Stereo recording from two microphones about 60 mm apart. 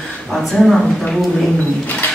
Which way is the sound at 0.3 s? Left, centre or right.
Centre.